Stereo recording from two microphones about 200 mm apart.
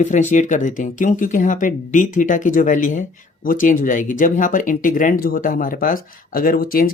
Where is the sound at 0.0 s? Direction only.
35° left (ahead or behind).